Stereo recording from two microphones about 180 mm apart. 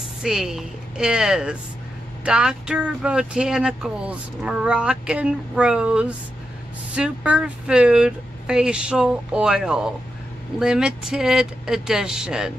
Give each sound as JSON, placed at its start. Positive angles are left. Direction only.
{"t": 0.2, "sound": "speech", "side_deg": -5}